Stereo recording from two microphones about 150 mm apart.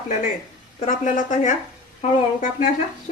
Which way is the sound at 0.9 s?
60° left (ahead or behind).